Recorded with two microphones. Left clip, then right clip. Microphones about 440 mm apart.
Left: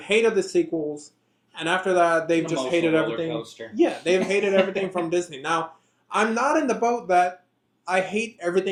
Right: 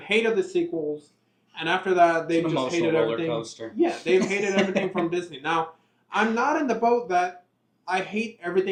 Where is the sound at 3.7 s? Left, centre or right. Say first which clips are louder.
Left 1 dB; left.